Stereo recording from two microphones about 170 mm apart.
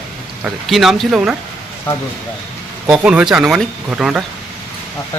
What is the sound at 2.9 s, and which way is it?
Speech, 5° right (ahead or behind).